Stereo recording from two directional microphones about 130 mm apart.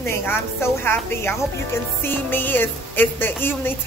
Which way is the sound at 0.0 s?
15° left (ahead or behind).